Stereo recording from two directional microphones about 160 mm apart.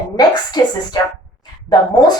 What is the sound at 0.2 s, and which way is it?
Speech, 25° left (ahead or behind).